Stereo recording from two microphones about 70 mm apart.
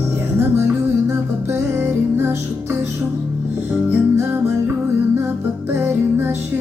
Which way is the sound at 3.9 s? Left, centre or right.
Right.